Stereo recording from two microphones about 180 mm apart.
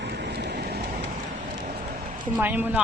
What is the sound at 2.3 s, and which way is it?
Speech, 10° right (ahead or behind).